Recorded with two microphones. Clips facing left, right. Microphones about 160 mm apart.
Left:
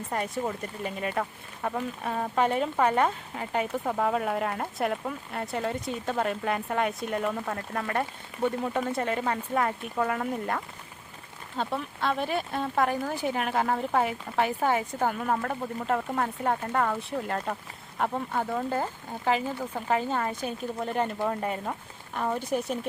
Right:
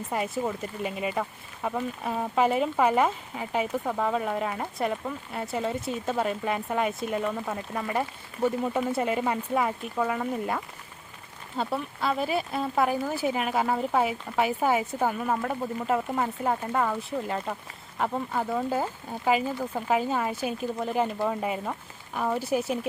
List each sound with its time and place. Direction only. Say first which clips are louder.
0.1 s speech: right 1 dB; 5° right (ahead or behind)